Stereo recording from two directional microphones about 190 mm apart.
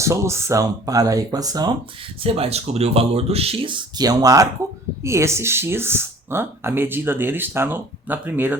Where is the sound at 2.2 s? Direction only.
30° right (ahead or behind).